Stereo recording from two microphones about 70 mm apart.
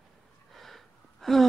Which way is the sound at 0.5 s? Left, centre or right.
Centre.